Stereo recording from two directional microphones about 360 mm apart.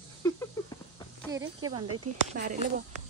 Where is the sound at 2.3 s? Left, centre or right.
Centre.